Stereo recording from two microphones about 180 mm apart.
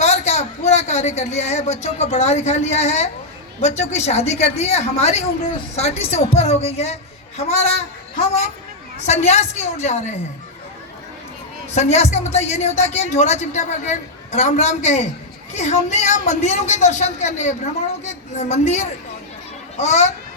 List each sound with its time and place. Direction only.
0.0 s a man's voice: 40° left (ahead or behind)
9.0 s speech: 40° left (ahead or behind)
11.7 s speech: 40° left (ahead or behind)